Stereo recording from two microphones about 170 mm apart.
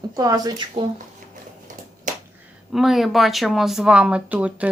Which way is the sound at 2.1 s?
50° right (ahead or behind).